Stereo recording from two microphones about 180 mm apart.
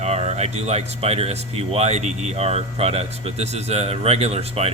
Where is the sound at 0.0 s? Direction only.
35° right (ahead or behind).